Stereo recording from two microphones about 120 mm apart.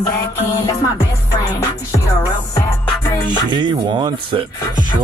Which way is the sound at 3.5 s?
40° right (ahead or behind).